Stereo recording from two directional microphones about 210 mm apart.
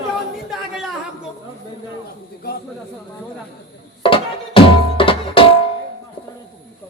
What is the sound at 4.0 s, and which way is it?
Music, 25° left (ahead or behind).